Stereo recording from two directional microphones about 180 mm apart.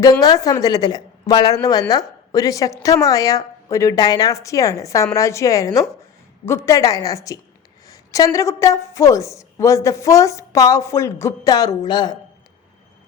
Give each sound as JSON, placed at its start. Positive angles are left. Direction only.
{"t": 0.0, "sound": "a woman's voice", "side_deg": 20}